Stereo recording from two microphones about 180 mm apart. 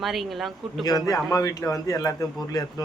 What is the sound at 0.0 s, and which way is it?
Speech, centre (ahead or behind).